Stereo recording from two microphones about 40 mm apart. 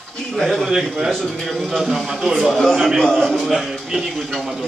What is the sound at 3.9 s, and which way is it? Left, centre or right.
Speech, centre.